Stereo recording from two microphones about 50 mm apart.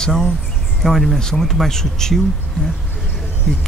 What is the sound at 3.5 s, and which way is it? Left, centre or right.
Speech, centre.